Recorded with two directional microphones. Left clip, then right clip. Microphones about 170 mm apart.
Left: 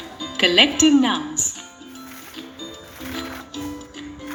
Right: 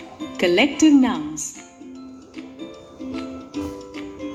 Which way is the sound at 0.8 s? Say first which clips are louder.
Right 1 dB; 5° right (ahead or behind).